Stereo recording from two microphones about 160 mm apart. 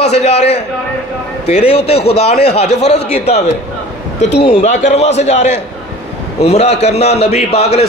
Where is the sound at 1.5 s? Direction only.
40° left (ahead or behind).